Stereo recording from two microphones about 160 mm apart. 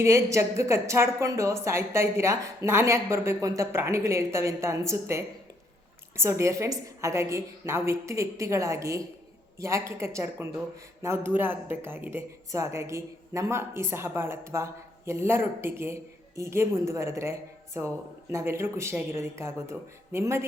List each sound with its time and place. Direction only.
0.0 s speech: 20° right (ahead or behind)